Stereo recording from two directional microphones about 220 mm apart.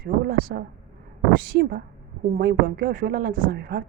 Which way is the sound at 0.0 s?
45° right (ahead or behind).